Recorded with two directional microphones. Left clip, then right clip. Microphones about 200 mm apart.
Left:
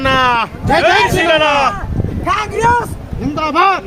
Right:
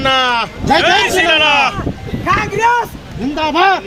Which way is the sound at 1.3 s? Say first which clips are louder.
Right 1 dB; 30° left (ahead or behind).